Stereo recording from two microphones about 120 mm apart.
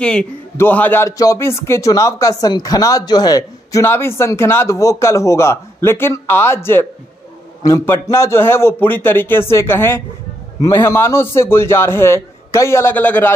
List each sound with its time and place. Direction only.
0.0 s a man's voice: 10° left (ahead or behind)
1.1 s speech: 30° left (ahead or behind)
3.8 s speech: 20° left (ahead or behind)